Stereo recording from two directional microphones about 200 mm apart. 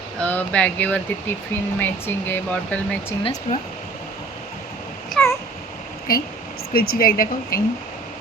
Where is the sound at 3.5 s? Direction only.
35° left (ahead or behind).